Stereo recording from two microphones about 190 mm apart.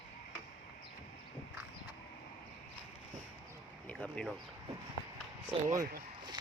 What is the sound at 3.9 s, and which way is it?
Speech, 5° left (ahead or behind).